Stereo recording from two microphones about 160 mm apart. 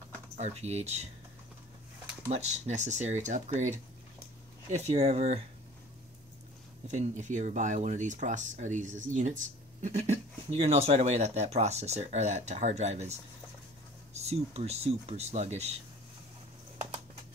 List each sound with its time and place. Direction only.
0.4 s speech: 40° right (ahead or behind)
2.2 s speech: 45° right (ahead or behind)
6.9 s speech: 50° right (ahead or behind)